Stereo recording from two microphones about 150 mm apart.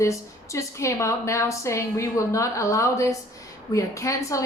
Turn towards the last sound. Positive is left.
turn(degrees=20)  # may be behind; listen again after turning